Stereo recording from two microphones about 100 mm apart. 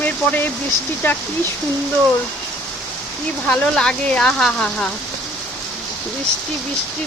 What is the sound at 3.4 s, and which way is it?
Speech, 15° left (ahead or behind).